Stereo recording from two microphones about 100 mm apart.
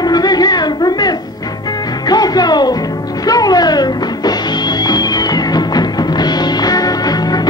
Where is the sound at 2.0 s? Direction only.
40° left (ahead or behind).